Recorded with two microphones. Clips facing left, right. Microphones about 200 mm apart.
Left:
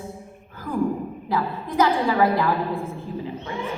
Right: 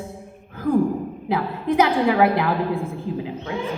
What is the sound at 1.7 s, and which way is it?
Speech, 75° right (ahead or behind).